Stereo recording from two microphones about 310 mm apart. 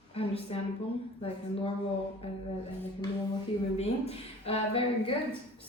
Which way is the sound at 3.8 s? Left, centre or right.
Centre.